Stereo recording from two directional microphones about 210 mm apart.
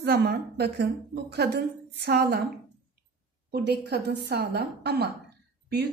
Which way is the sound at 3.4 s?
50° right (ahead or behind).